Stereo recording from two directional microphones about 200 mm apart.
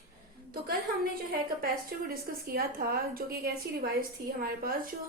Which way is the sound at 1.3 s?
50° right (ahead or behind).